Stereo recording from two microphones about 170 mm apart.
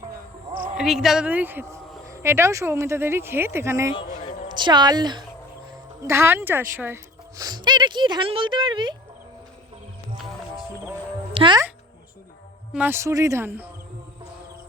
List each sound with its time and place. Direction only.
0.5 s a sound: 50° right (ahead or behind)
0.8 s speech: centre (ahead or behind)
4.5 s speech: 25° right (ahead or behind)
6.0 s speech: 15° right (ahead or behind)
11.3 s a child's voice: 30° right (ahead or behind)
12.7 s speech: 10° right (ahead or behind)